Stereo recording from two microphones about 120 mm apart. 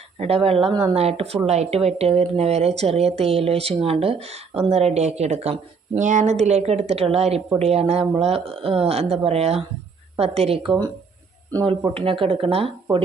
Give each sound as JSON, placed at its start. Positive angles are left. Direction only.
{"t": 0.2, "sound": "speech", "side_deg": -55}
{"t": 0.7, "sound": "speech", "side_deg": -35}
{"t": 0.9, "sound": "speech", "side_deg": -55}
{"t": 11.9, "sound": "speech", "side_deg": -50}